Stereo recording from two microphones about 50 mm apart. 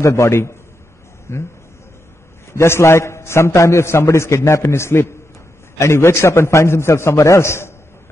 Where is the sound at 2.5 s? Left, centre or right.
Left.